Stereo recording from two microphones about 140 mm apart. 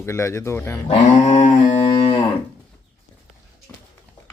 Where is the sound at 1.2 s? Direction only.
60° left (ahead or behind).